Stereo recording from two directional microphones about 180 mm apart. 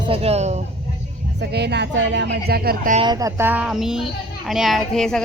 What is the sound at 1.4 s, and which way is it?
Speech, 70° right (ahead or behind).